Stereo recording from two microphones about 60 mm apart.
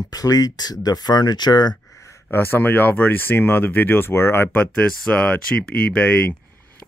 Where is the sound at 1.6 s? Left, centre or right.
Left.